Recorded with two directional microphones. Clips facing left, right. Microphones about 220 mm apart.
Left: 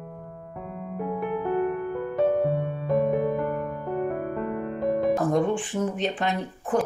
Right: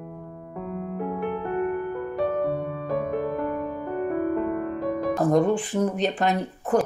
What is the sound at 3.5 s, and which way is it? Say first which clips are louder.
Music: right 1 dB; centre (ahead or behind).